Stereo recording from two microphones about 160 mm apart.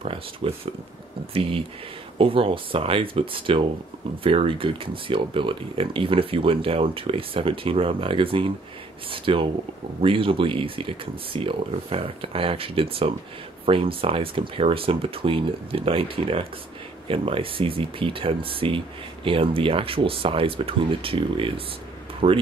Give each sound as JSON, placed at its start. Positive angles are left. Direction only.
{"t": 0.0, "sound": "speech", "side_deg": -35}